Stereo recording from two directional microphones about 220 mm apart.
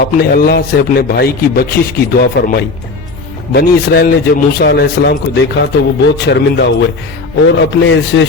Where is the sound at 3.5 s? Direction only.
45° left (ahead or behind).